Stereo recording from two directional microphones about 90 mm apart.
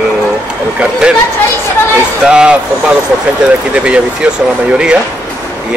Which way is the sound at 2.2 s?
10° right (ahead or behind).